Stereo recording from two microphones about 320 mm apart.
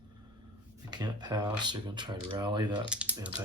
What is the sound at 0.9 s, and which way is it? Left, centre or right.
Speech, centre.